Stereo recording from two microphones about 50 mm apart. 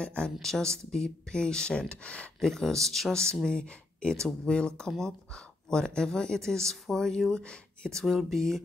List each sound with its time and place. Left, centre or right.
0.0 s speech: centre
2.4 s speech: centre
8.0 s speech: centre